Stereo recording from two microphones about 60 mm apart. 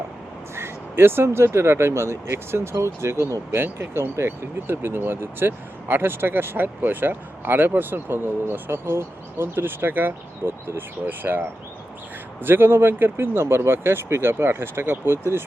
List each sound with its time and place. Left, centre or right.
0.5 s speech: right